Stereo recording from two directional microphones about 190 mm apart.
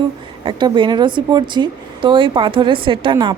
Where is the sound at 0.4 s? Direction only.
25° right (ahead or behind).